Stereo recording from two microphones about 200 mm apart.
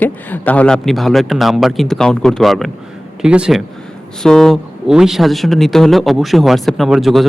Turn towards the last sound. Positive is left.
turn(degrees=0)  # may be behind; listen again after turning